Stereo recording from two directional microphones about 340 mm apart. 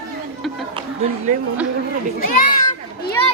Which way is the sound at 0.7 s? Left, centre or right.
Centre.